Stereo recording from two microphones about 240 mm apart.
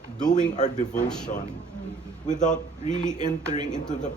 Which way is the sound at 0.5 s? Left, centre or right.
Left.